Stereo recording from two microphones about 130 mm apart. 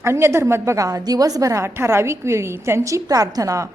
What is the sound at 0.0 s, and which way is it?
A woman's voice, 20° right (ahead or behind).